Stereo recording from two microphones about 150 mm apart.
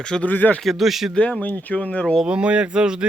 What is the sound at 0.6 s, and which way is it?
Speech, centre (ahead or behind).